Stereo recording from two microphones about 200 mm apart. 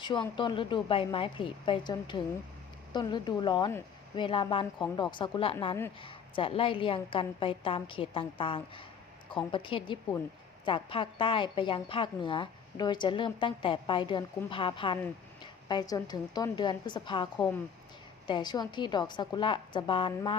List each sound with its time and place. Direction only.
0.0 s a woman's voice: 25° left (ahead or behind)
18.3 s a woman's voice: 20° left (ahead or behind)